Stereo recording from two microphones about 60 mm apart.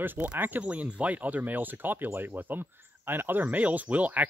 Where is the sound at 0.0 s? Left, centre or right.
Right.